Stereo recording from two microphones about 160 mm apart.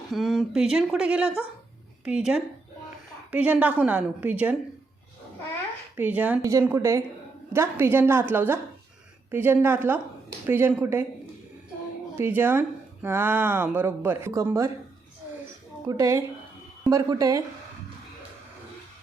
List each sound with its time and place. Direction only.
0.1 s speech: centre (ahead or behind)
6.0 s a woman's voice: 10° right (ahead or behind)
12.1 s speech: 15° right (ahead or behind)
15.9 s a woman's voice: 20° right (ahead or behind)